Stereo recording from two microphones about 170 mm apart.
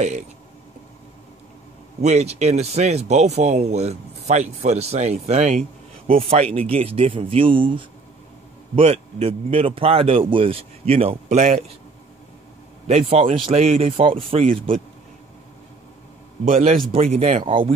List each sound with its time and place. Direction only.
2.0 s speech: 40° right (ahead or behind)
13.1 s speech: 35° right (ahead or behind)
16.4 s speech: 40° right (ahead or behind)